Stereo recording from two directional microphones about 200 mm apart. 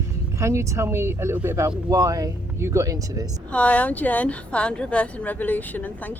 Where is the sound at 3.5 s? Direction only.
5° left (ahead or behind).